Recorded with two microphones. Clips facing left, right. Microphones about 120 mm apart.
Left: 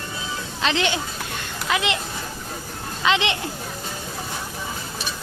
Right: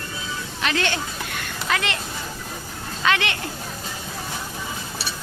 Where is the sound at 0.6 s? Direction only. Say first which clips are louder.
Left 2 dB; 20° left (ahead or behind).